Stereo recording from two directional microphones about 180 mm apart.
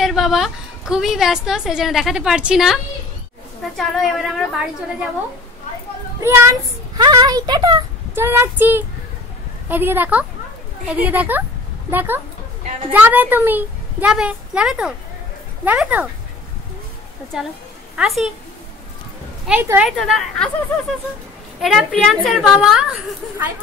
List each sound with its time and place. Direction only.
0.0 s a woman's voice: centre (ahead or behind)
6.2 s a woman's voice: 15° right (ahead or behind)
17.3 s a woman's voice: centre (ahead or behind)
19.4 s a woman's voice: 10° right (ahead or behind)
20.0 s a woman's voice: centre (ahead or behind)
21.5 s a woman's voice: centre (ahead or behind)